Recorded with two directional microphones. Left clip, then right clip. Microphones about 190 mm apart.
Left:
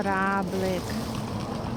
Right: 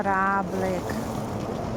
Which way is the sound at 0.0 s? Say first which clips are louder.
Right 3 dB; 10° right (ahead or behind).